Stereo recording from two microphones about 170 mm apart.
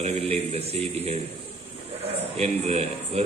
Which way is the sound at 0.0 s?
35° right (ahead or behind).